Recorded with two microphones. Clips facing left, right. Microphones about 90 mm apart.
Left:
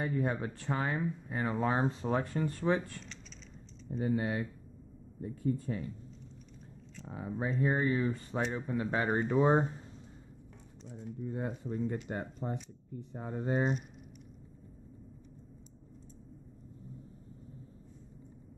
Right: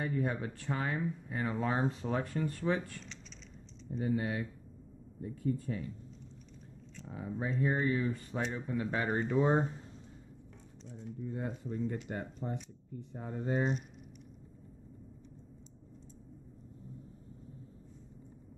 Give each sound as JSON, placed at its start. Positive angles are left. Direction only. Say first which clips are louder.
{"t": 0.0, "sound": "speech", "louder": "left 1 dB", "side_deg": 30}
{"t": 3.9, "sound": "speech", "louder": "left 1 dB", "side_deg": 30}
{"t": 7.1, "sound": "speech", "louder": "left 2 dB", "side_deg": 30}
{"t": 11.3, "sound": "speech", "louder": "left 2 dB", "side_deg": 35}